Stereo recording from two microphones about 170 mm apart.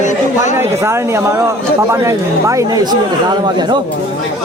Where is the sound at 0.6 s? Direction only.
15° right (ahead or behind).